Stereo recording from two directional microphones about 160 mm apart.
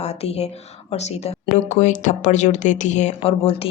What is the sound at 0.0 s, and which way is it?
Speech, 40° left (ahead or behind).